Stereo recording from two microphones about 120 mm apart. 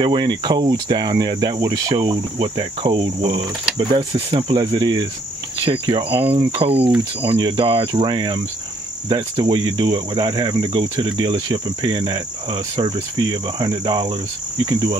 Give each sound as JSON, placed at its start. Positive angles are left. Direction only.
{"t": 0.0, "sound": "speech", "side_deg": -35}
{"t": 4.5, "sound": "speech", "side_deg": -35}